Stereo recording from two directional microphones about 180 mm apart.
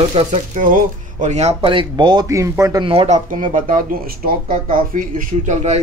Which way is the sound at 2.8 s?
30° right (ahead or behind).